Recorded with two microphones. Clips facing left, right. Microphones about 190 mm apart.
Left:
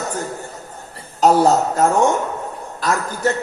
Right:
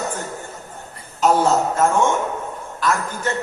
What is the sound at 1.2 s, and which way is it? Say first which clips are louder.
A man's voice: left 3 dB; 40° left (ahead or behind).